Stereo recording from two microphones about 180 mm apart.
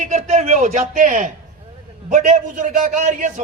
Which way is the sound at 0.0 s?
40° right (ahead or behind).